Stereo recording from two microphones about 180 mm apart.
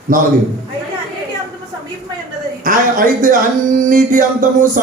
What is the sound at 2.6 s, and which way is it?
Speech, 50° right (ahead or behind).